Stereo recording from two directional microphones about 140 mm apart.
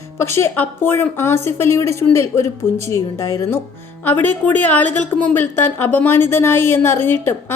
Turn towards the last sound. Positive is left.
turn(degrees=15)  # may be behind; listen again after turning